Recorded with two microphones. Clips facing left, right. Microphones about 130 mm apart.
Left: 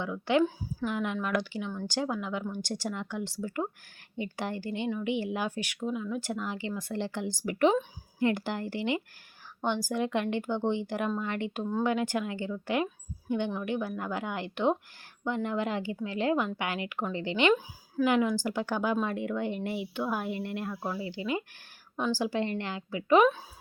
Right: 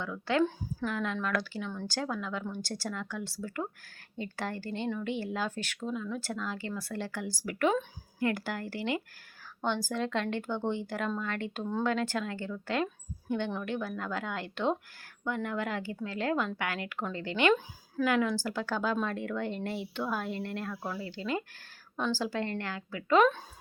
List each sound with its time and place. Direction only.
0.0 s a woman's voice: 20° left (ahead or behind)